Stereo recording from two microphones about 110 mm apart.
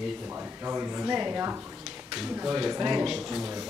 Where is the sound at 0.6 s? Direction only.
20° right (ahead or behind); by 3.4 s 5° right (ahead or behind).